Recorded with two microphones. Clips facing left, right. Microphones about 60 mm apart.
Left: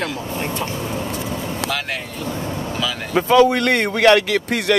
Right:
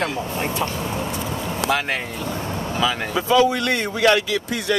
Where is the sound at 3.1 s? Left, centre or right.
Left.